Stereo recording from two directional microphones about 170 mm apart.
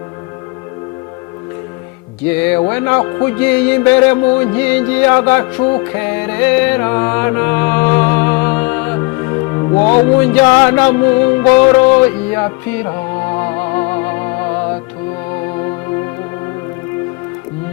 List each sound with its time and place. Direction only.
2.3 s music: 10° left (ahead or behind)